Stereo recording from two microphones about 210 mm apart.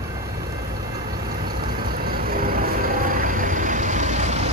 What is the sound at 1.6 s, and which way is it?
Vehicle, 45° right (ahead or behind).